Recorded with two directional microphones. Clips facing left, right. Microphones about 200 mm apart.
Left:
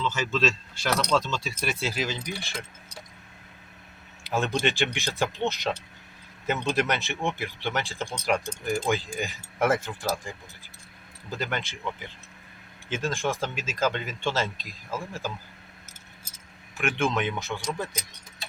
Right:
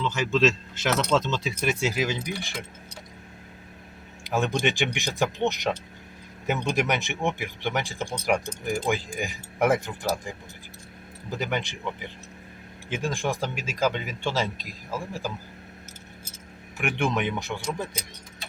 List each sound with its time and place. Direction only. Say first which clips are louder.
0.0 s speech: right 4 dB; 15° right (ahead or behind)
4.2 s speech: right 1 dB; 15° right (ahead or behind)
16.7 s speech: even; 15° right (ahead or behind)